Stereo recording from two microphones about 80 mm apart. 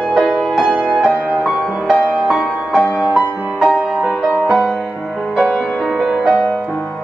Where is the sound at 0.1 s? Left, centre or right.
Centre.